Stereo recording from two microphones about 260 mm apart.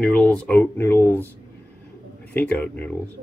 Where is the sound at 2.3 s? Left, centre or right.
Centre.